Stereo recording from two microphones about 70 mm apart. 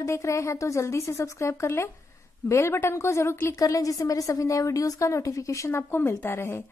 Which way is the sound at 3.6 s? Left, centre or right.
Left.